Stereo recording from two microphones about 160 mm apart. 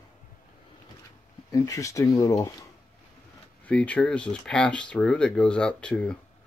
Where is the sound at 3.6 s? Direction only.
10° left (ahead or behind).